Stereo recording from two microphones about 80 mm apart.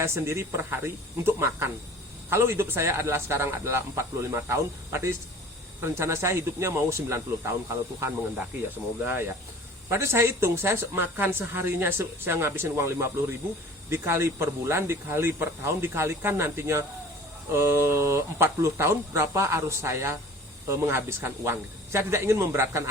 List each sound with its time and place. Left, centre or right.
0.0 s speech: right
9.0 s speech: right